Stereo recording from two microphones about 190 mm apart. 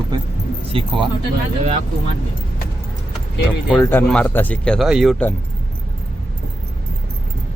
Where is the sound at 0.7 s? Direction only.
30° right (ahead or behind).